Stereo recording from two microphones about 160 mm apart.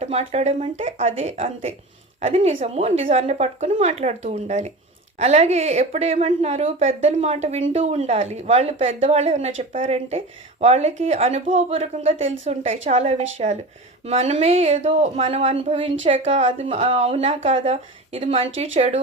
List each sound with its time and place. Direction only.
0.0 s a woman's voice: 40° right (ahead or behind)